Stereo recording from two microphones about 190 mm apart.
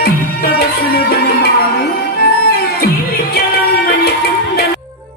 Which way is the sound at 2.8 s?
55° left (ahead or behind).